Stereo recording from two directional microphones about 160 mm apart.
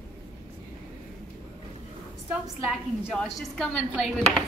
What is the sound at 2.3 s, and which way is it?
Speech, centre (ahead or behind).